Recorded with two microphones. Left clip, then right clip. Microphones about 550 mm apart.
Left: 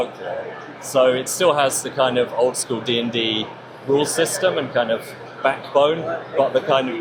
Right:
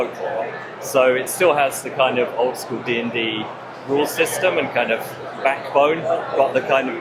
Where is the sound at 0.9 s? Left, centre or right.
Left.